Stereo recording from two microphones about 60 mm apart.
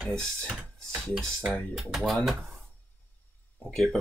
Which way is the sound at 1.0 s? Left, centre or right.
Centre.